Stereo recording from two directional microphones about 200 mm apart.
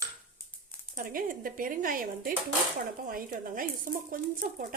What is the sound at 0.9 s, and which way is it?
Speech, 45° right (ahead or behind).